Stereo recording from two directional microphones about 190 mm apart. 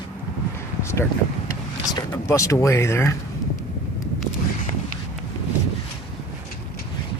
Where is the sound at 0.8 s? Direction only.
15° left (ahead or behind).